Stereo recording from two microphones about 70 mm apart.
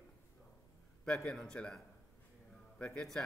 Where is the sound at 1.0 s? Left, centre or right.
Centre.